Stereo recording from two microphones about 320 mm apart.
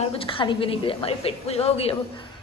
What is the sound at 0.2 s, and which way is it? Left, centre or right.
A woman's voice, centre.